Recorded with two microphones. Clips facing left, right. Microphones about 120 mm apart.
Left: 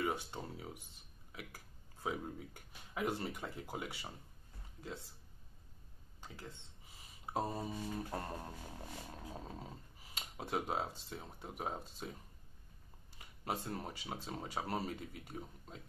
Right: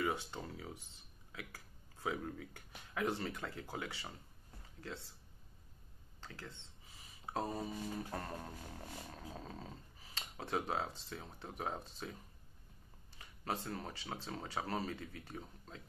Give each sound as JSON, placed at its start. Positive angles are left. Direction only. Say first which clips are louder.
{"t": 0.0, "sound": "a sound", "louder": "even", "side_deg": 20}
{"t": 1.3, "sound": "speech", "louder": "even", "side_deg": 15}
{"t": 6.2, "sound": "speech", "louder": "even", "side_deg": 15}
{"t": 13.2, "sound": "speech", "louder": "even", "side_deg": 15}